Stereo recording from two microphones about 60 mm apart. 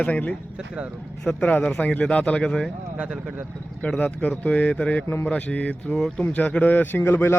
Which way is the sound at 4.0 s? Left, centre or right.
Left.